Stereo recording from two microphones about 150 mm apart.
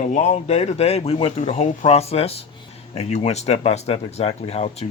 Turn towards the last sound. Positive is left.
turn(degrees=45)  # may be behind; listen again after turning